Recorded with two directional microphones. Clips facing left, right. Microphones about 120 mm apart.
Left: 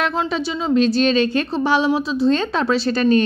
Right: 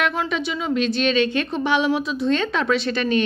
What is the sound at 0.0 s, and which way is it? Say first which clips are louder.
A woman's voice: left 2 dB; 30° left (ahead or behind).